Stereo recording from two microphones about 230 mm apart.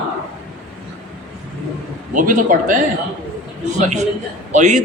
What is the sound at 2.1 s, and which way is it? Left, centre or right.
A man's voice, right.